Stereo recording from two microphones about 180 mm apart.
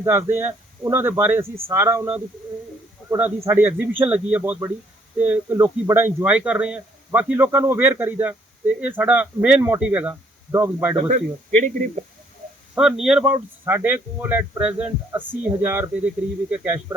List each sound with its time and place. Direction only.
0.0 s a man's voice: 15° right (ahead or behind)
11.1 s speech: 45° right (ahead or behind)
12.7 s a man's voice: 5° right (ahead or behind)